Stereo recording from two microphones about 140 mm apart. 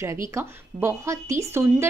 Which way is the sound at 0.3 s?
20° right (ahead or behind).